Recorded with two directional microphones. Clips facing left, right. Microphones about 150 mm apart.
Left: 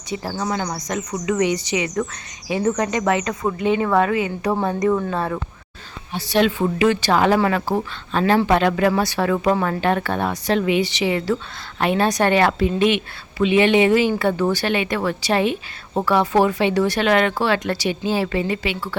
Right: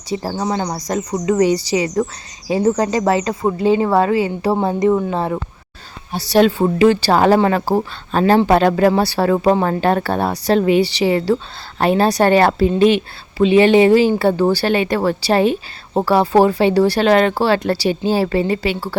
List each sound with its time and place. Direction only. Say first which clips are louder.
0.1 s speech: right 4 dB; 30° right (ahead or behind)
6.1 s speech: right 5 dB; 35° right (ahead or behind)